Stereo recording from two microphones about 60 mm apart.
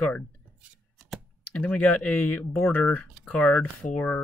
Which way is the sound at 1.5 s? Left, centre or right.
Left.